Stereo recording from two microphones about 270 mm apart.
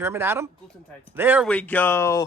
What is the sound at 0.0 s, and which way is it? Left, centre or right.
Speech, centre.